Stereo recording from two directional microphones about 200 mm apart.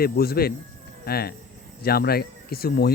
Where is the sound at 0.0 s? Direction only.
50° left (ahead or behind).